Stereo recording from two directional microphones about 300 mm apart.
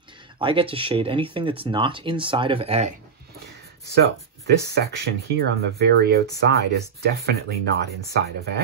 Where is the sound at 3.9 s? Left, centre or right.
Right.